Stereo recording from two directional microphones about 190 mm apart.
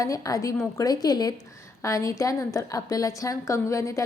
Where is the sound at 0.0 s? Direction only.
15° left (ahead or behind).